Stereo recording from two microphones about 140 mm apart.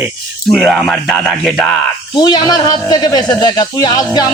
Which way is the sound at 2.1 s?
30° left (ahead or behind).